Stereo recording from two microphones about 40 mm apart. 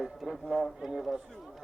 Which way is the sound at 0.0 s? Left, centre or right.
Centre.